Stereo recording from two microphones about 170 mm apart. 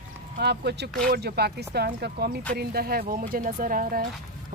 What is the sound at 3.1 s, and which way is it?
Speech, 55° right (ahead or behind).